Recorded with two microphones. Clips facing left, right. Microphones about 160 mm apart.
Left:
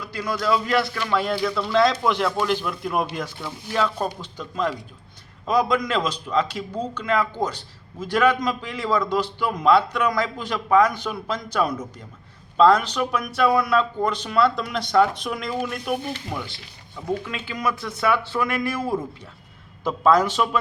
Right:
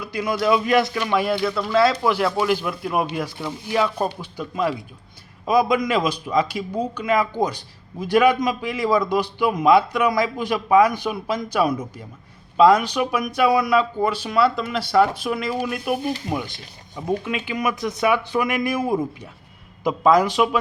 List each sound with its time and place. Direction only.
0.0 s a man's voice: 15° right (ahead or behind)